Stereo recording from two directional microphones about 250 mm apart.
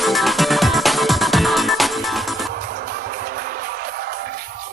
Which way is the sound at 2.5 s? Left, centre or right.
Right.